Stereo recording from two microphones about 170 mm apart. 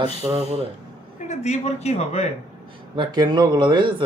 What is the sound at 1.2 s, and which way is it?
Speech, 40° left (ahead or behind).